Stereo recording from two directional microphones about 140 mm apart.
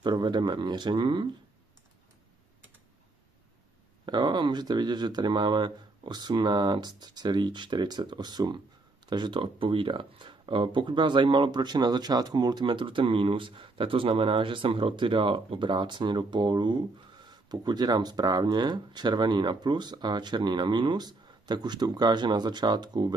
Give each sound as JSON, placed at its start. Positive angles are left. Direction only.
{"t": 0.0, "sound": "speech", "side_deg": -30}
{"t": 4.0, "sound": "speech", "side_deg": -30}